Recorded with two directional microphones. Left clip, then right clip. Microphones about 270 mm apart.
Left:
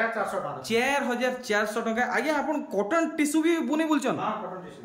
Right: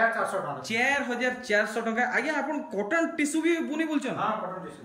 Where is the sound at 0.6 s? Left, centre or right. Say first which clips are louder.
Left 1 dB; centre.